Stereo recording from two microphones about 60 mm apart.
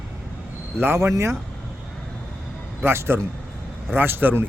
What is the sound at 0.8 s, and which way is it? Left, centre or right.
Speech, right.